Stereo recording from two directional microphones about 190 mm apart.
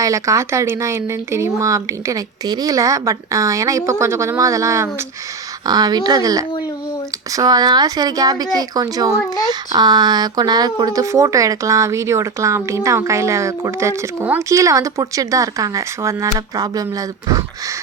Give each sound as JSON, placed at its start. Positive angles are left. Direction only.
{"t": 0.0, "sound": "speech", "side_deg": -15}